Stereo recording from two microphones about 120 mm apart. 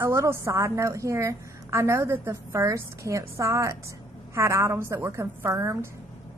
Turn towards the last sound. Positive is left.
turn(degrees=-25)  # may be behind; listen again after turning